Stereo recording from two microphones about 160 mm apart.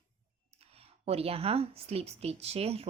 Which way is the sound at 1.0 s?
40° right (ahead or behind).